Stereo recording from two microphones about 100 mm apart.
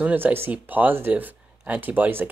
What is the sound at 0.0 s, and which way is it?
Speech, 20° right (ahead or behind).